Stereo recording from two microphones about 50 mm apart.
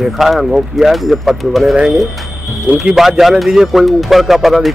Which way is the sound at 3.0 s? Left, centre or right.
Centre.